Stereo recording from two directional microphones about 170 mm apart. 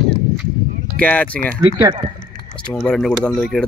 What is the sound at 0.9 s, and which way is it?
Speech, 10° left (ahead or behind).